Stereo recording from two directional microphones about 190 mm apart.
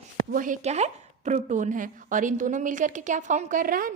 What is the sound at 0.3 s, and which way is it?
A woman's voice, 45° right (ahead or behind).